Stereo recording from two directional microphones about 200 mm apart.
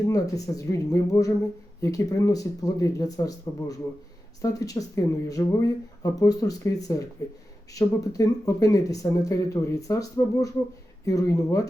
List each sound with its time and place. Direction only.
0.1 s speech: 15° left (ahead or behind)